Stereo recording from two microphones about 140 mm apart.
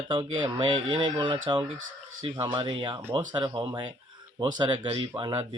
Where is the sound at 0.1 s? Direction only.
35° right (ahead or behind).